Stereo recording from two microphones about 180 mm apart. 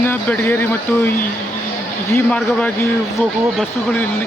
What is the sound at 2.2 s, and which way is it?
Speech, 5° left (ahead or behind).